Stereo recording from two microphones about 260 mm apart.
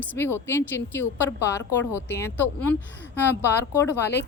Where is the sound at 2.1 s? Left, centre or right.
Centre.